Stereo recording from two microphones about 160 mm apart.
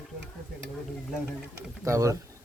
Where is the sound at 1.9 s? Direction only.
20° right (ahead or behind).